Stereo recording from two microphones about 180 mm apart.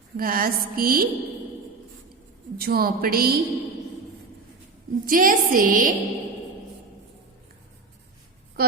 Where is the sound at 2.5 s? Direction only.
55° right (ahead or behind).